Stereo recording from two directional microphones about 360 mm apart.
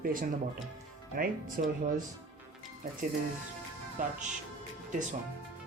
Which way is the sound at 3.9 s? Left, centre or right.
Right.